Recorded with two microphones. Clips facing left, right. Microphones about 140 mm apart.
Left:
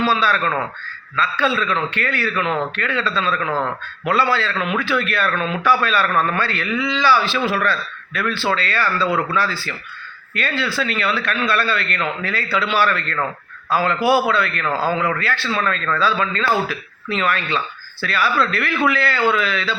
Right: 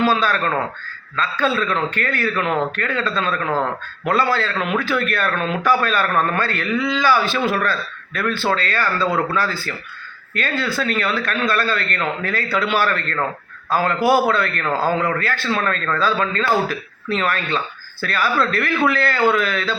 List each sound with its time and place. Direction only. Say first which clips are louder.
0.0 s speech: right 1 dB; 45° right (ahead or behind)